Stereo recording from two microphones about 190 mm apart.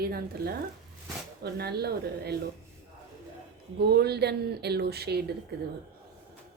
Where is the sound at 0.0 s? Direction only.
55° right (ahead or behind).